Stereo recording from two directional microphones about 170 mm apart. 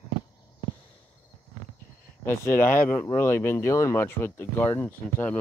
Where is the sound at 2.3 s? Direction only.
15° left (ahead or behind).